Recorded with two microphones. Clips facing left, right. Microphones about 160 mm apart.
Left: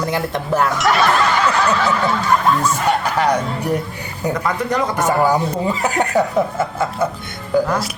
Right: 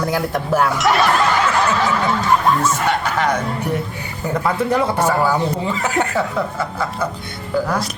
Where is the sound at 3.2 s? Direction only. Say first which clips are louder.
Left 2 dB; 35° left (ahead or behind).